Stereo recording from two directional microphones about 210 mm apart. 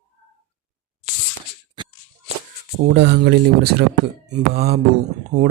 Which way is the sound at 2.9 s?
55° right (ahead or behind).